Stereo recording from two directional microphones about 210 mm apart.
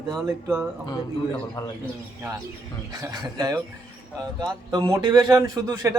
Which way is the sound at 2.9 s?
15° right (ahead or behind).